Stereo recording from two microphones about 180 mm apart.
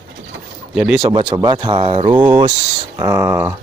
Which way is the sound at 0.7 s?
Centre (ahead or behind).